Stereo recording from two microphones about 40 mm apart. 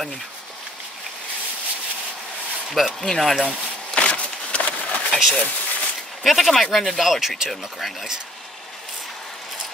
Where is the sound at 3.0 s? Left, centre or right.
Centre.